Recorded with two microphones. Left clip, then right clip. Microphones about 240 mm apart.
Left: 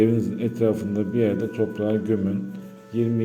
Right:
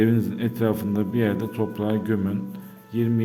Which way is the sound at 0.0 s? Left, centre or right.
Right.